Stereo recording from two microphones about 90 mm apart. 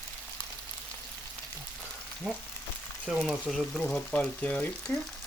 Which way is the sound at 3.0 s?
Centre (ahead or behind).